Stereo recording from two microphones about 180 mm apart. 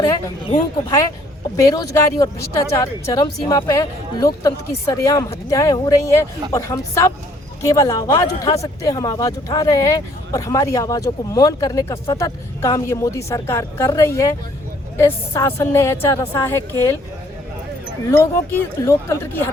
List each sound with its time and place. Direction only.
1.5 s speech: 15° left (ahead or behind)
18.1 s speech: 10° left (ahead or behind)